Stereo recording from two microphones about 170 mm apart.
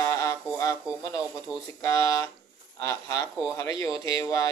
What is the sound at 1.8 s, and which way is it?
Speech, 20° left (ahead or behind).